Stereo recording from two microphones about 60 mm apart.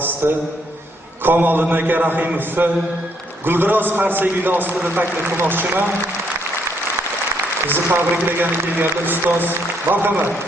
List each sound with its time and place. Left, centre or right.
1.2 s a man's voice: right
7.7 s a man's voice: right